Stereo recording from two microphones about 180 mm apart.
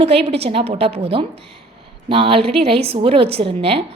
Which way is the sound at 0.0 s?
35° right (ahead or behind).